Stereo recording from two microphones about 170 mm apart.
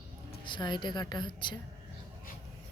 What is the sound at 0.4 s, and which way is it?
A woman's voice, 25° left (ahead or behind).